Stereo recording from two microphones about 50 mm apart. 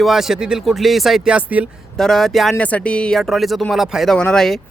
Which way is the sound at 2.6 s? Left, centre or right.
Left.